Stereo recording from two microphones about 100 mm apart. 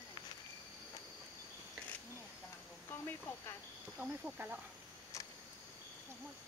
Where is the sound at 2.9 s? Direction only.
20° left (ahead or behind).